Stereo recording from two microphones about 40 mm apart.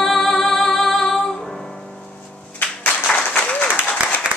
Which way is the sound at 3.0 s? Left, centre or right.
Left.